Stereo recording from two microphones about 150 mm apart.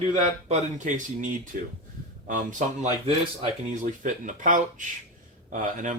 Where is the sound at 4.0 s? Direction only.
60° right (ahead or behind).